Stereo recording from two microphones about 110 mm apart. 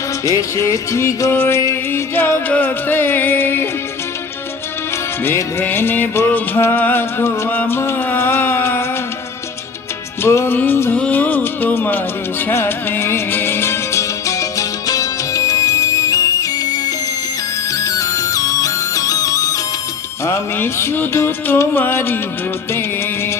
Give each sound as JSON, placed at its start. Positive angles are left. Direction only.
{"t": 0.3, "sound": "music", "side_deg": 30}
{"t": 5.2, "sound": "music", "side_deg": 20}
{"t": 10.2, "sound": "music", "side_deg": 25}